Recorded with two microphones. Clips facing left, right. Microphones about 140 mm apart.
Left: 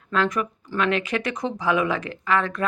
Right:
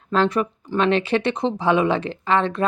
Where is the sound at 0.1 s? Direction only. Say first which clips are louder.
Right 4 dB; 30° right (ahead or behind).